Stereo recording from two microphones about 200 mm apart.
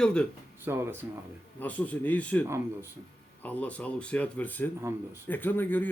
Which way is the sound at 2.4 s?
15° right (ahead or behind).